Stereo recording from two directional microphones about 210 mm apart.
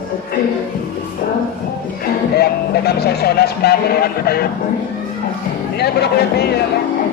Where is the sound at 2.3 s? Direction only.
50° left (ahead or behind).